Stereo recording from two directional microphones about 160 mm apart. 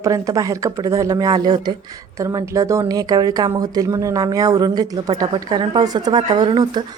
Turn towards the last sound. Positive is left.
turn(degrees=-25)  # may be behind; listen again after turning